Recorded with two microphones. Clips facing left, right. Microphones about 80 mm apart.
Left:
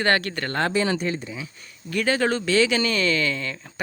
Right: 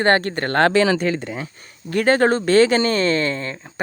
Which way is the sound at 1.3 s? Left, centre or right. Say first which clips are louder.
Right 5 dB; right.